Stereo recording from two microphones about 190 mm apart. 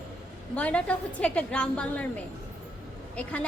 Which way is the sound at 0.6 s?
5° left (ahead or behind).